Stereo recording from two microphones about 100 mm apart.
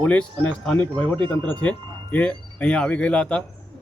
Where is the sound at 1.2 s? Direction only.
55° right (ahead or behind).